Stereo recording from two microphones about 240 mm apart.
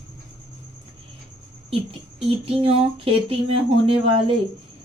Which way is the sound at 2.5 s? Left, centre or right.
Right.